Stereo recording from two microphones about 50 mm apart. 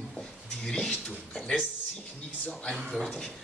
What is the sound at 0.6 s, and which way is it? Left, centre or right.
Speech, centre.